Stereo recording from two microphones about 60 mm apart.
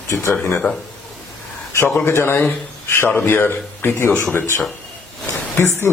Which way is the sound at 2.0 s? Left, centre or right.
Left.